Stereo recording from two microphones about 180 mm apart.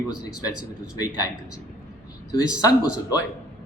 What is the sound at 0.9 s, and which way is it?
Speech, 20° left (ahead or behind).